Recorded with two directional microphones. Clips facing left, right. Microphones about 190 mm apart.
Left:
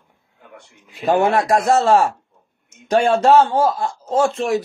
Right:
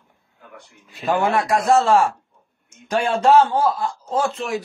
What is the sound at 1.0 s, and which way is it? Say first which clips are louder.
Speech: left 4 dB; 30° left (ahead or behind).